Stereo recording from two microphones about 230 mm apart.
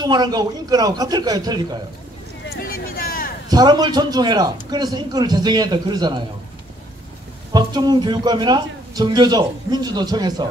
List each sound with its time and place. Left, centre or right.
0.0 s speech: centre
2.4 s a sound: left
3.4 s speech: centre
7.5 s a man's voice: centre